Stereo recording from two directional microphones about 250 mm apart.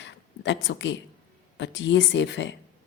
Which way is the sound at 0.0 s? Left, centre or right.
Left.